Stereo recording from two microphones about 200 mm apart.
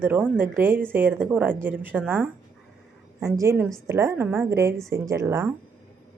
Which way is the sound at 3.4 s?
15° right (ahead or behind).